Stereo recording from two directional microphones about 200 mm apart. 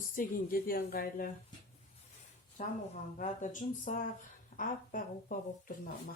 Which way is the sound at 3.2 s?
40° left (ahead or behind).